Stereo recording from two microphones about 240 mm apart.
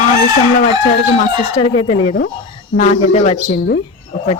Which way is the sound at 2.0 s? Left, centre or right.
Left.